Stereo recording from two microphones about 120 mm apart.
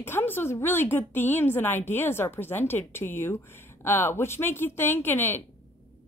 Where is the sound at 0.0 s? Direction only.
20° left (ahead or behind).